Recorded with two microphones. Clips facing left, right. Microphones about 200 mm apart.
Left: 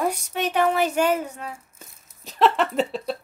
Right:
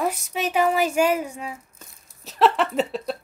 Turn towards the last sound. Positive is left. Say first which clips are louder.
# even
turn(degrees=0)  # may be behind; listen again after turning